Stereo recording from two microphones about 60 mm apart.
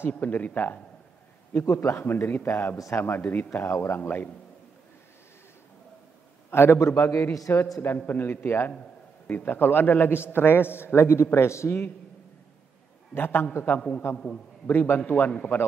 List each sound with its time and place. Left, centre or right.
0.2 s a man's voice: left
1.5 s a man's voice: left
3.6 s a man's voice: left
6.5 s a man's voice: left
8.1 s a man's voice: left
13.1 s a man's voice: left
13.7 s a man's voice: centre
14.7 s a man's voice: left